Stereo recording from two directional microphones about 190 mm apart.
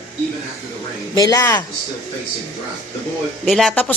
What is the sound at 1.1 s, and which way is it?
Speech, 20° left (ahead or behind).